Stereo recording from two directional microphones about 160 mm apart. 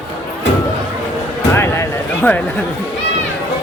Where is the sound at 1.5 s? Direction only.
15° left (ahead or behind).